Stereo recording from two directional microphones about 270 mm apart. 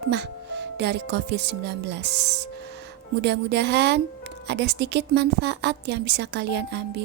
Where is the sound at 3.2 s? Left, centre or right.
Right.